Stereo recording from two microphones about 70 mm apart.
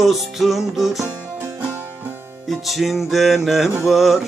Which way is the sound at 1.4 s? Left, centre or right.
Right.